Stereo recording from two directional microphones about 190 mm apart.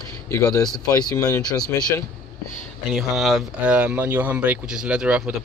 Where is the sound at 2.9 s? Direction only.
Centre (ahead or behind).